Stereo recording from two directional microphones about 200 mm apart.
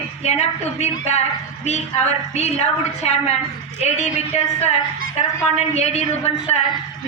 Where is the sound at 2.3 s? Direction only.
35° left (ahead or behind).